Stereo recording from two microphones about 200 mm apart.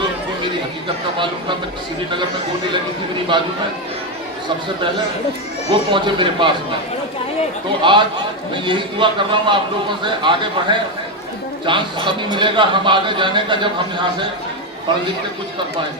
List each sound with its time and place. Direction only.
3.3 s a man's voice: 25° right (ahead or behind)
5.9 s a man's voice: 25° right (ahead or behind)
7.8 s a man's voice: 25° right (ahead or behind)